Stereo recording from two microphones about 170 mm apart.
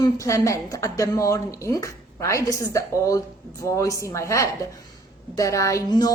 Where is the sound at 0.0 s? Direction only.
20° left (ahead or behind).